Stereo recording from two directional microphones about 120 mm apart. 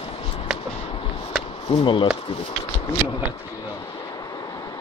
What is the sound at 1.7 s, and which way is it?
Speech, 40° left (ahead or behind).